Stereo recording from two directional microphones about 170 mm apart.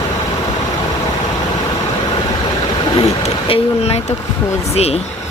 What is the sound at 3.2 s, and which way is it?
Speech, 35° left (ahead or behind).